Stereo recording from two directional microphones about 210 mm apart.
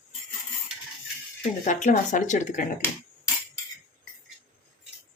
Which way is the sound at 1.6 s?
35° left (ahead or behind).